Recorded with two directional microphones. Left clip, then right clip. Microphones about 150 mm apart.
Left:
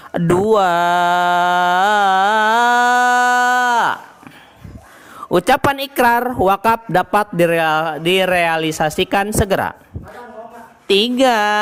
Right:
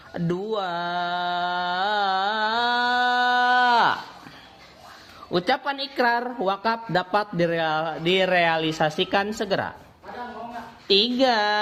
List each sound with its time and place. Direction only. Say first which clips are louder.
0.1 s mantra: left 13 dB; 50° left (ahead or behind); by 3.9 s 20° left (ahead or behind)
5.3 s speech: left 10 dB; 45° left (ahead or behind)
10.8 s speech: left 6 dB; 40° left (ahead or behind)